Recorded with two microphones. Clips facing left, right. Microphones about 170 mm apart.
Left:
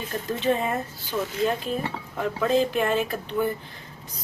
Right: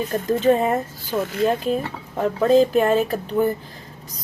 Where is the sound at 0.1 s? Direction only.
45° right (ahead or behind).